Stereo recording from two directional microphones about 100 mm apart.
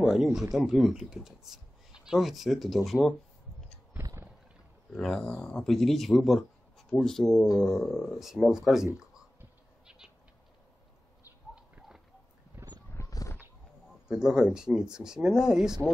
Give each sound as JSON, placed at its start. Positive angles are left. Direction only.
{"t": 0.1, "sound": "speech", "side_deg": -5}
{"t": 4.0, "sound": "boat", "side_deg": -30}
{"t": 4.9, "sound": "speech", "side_deg": 5}
{"t": 7.4, "sound": "speech", "side_deg": 35}
{"t": 7.8, "sound": "speech", "side_deg": 0}
{"t": 9.8, "sound": "a sound", "side_deg": -5}
{"t": 11.5, "sound": "a sound", "side_deg": -10}
{"t": 12.6, "sound": "wild animals", "side_deg": -20}
{"t": 12.9, "sound": "a sound", "side_deg": 35}
{"t": 14.0, "sound": "speech", "side_deg": -5}